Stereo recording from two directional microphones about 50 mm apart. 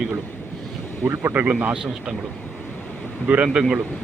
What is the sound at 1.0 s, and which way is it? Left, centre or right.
Speech, right.